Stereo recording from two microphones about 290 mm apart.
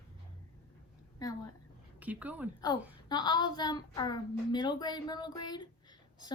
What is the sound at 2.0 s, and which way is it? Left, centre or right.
Speech, centre.